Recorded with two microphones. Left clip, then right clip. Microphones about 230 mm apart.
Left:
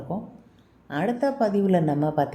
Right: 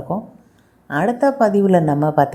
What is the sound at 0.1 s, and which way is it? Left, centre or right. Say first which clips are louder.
Speech: right 9 dB; right.